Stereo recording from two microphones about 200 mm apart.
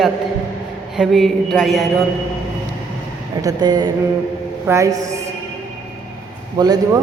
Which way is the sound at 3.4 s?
20° right (ahead or behind).